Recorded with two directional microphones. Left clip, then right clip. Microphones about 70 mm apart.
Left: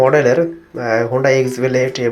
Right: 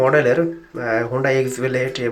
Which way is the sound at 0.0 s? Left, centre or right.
Centre.